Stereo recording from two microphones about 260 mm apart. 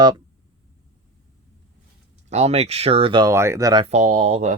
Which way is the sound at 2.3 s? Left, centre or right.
Right.